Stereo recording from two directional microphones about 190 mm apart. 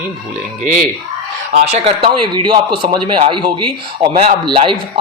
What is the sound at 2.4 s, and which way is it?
Speech, 25° right (ahead or behind).